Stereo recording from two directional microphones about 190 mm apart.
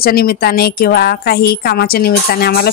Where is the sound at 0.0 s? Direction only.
50° left (ahead or behind).